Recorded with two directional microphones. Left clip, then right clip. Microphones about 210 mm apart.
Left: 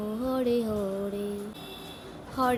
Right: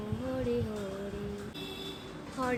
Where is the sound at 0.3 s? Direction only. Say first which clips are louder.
Left 6 dB; 30° left (ahead or behind).